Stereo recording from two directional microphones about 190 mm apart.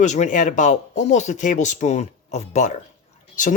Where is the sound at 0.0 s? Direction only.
40° left (ahead or behind).